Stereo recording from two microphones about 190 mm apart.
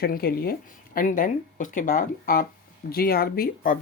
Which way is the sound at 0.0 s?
50° left (ahead or behind).